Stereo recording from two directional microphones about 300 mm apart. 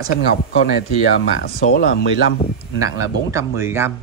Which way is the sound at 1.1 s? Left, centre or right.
Left.